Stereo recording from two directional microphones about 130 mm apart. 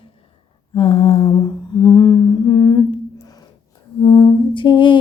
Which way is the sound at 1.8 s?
30° left (ahead or behind).